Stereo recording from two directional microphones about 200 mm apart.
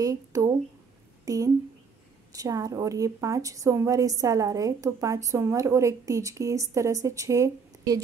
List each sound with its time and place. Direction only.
0.0 s a woman's voice: 15° right (ahead or behind)